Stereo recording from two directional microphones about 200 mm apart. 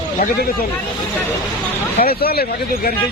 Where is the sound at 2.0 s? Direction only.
50° left (ahead or behind).